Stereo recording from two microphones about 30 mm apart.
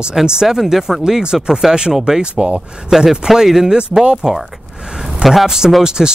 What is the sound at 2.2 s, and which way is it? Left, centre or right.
Speech, right.